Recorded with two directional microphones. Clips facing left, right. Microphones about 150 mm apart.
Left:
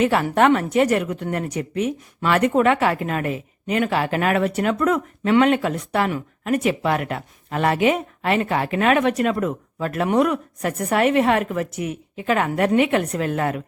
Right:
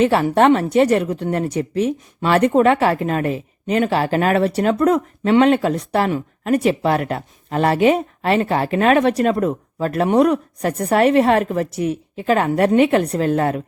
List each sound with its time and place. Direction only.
0.0 s speech: 30° right (ahead or behind)